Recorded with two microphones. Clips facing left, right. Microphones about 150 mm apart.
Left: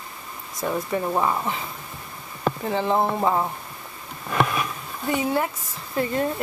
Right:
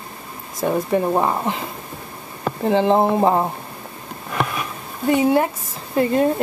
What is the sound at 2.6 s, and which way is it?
Speech, 25° right (ahead or behind).